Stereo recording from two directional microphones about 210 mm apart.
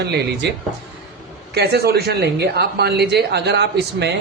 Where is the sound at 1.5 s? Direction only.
50° right (ahead or behind).